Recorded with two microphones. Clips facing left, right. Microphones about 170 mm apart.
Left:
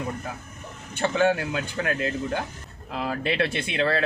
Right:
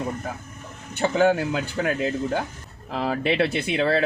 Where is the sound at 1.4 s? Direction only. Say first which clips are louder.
Right 3 dB; 25° right (ahead or behind).